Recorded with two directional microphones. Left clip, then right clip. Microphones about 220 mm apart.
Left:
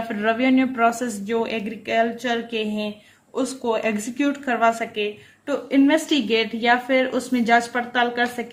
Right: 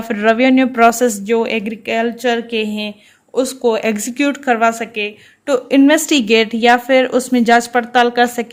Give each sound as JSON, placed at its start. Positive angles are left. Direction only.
{"t": 0.1, "sound": "speech", "side_deg": -40}